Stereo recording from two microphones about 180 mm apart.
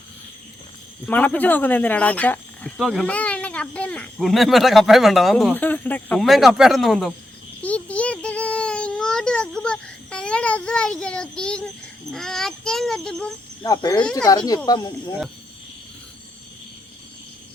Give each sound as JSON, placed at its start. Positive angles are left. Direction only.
{"t": 1.0, "sound": "speech", "side_deg": 10}
{"t": 7.6, "sound": "child singing", "side_deg": 10}
{"t": 11.0, "sound": "a child's voice", "side_deg": 5}
{"t": 13.6, "sound": "speech", "side_deg": 20}
{"t": 14.0, "sound": "a child's voice", "side_deg": 5}
{"t": 14.3, "sound": "speech", "side_deg": 20}